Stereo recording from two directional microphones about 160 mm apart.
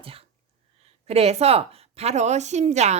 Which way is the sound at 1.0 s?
40° right (ahead or behind).